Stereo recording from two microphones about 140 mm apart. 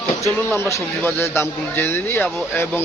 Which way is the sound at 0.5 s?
20° left (ahead or behind).